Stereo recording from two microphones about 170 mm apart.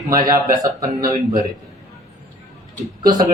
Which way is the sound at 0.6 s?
20° right (ahead or behind).